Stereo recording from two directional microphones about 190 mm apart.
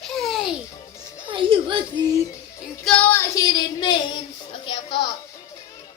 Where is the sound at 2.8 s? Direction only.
5° left (ahead or behind).